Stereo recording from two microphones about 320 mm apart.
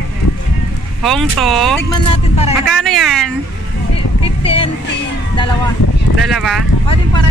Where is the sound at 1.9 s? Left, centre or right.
Centre.